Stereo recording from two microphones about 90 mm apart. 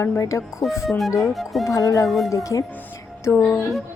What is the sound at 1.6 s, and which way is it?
A woman's voice, 40° left (ahead or behind).